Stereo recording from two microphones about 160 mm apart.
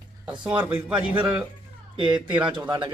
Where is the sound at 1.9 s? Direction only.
30° right (ahead or behind).